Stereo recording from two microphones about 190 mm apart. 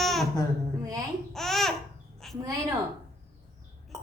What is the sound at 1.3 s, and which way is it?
Babbling, centre (ahead or behind).